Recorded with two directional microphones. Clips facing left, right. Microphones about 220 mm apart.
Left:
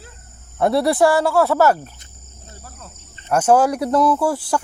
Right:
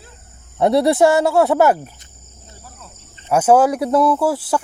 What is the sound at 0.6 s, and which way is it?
Speech, 20° right (ahead or behind).